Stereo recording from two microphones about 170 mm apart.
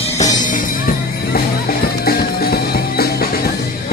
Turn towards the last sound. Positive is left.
turn(degrees=65)  # may be behind; listen again after turning